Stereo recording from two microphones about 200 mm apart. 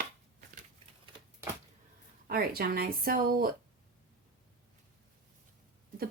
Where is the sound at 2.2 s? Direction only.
50° right (ahead or behind).